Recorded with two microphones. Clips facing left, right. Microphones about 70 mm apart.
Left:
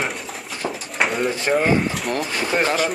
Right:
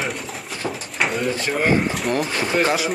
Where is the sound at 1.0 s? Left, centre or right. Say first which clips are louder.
Left 1 dB; centre.